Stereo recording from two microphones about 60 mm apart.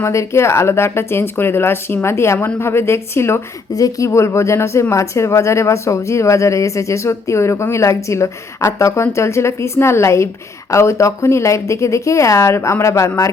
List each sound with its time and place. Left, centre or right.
0.0 s speech: left
3.8 s a woman's voice: left